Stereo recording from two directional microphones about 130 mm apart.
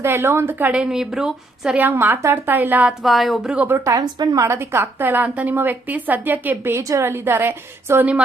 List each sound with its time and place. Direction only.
0.0 s a woman's voice: 20° right (ahead or behind)
3.0 s a woman's voice: centre (ahead or behind); by 4.0 s 20° right (ahead or behind)
4.0 s a woman's voice: 30° right (ahead or behind); by 8.2 s 15° right (ahead or behind)